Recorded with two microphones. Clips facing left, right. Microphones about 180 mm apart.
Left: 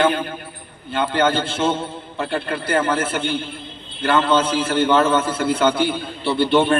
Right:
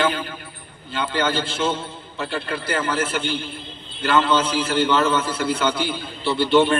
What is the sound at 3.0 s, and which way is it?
Speech, 30° left (ahead or behind).